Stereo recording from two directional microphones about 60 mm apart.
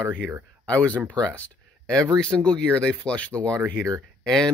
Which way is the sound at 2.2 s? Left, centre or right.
Centre.